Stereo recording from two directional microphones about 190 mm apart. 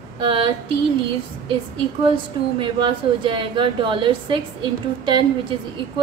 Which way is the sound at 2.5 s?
25° right (ahead or behind).